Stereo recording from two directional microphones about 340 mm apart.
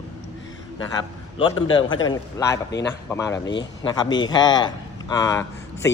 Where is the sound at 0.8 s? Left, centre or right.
Centre.